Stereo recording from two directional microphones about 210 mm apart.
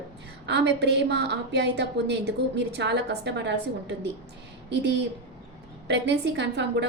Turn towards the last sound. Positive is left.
turn(degrees=-55)  # may be behind; listen again after turning